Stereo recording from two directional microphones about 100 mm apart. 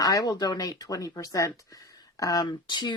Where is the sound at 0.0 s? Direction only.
40° left (ahead or behind).